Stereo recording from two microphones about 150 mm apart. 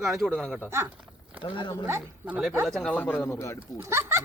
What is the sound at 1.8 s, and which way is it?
Speech, 10° right (ahead or behind).